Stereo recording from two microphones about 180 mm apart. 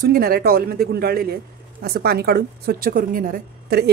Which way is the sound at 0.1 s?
55° right (ahead or behind).